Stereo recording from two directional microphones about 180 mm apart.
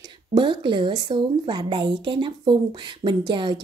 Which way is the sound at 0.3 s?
25° right (ahead or behind).